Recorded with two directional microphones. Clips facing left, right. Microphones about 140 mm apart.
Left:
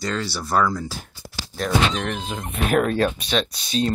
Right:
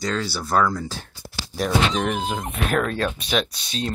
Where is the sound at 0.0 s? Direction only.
Centre (ahead or behind).